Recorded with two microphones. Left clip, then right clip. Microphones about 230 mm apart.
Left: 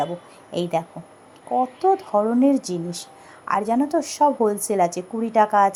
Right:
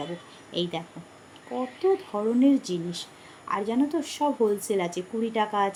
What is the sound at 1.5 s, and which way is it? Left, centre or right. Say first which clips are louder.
Speech: left 6 dB; left.